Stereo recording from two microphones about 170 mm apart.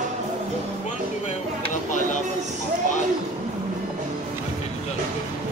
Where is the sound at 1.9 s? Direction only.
45° left (ahead or behind).